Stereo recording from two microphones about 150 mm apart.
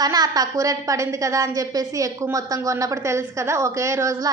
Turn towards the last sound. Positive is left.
turn(degrees=-20)  # may be behind; listen again after turning